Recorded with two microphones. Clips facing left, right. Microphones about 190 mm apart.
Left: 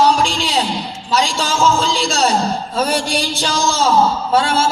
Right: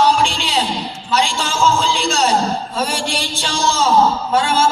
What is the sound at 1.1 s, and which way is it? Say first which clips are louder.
A man's voice: left 1 dB; 35° left (ahead or behind).